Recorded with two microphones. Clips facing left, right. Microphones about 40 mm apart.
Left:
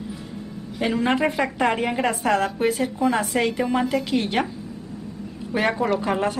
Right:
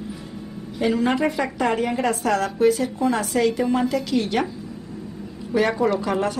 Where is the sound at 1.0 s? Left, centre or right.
Left.